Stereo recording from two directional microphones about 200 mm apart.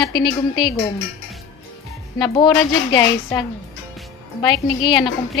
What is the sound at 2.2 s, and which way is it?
A woman's voice, 20° left (ahead or behind).